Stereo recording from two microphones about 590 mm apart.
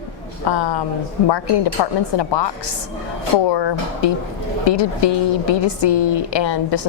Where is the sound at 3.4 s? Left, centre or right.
Left.